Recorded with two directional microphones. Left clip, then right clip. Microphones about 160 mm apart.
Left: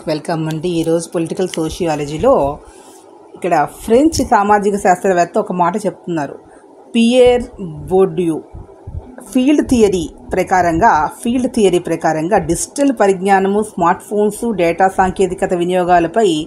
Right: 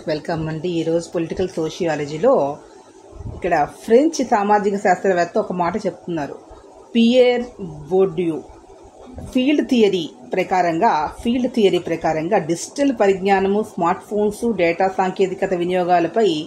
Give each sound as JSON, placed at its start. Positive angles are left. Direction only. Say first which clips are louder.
{"t": 0.0, "sound": "a woman's voice", "louder": "left 4 dB", "side_deg": 50}